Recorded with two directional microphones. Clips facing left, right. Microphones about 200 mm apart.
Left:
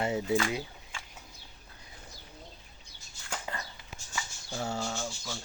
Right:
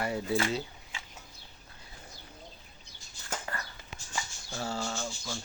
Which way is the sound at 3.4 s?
15° left (ahead or behind).